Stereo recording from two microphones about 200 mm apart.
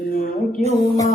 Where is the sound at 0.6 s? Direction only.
35° right (ahead or behind).